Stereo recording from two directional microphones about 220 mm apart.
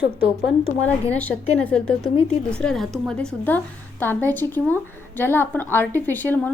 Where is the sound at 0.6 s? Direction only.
5° left (ahead or behind).